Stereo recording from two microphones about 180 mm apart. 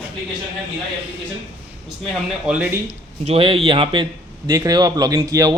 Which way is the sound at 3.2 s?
30° right (ahead or behind).